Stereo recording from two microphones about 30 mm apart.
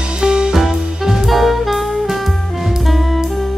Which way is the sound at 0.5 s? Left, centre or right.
Centre.